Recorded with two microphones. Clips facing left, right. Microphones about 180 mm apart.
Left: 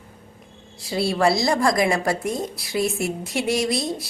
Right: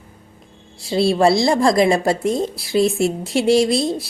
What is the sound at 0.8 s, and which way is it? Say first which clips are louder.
A woman's voice: right 6 dB; 25° right (ahead or behind).